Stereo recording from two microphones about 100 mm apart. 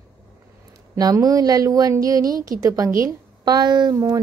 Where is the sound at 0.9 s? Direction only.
40° right (ahead or behind).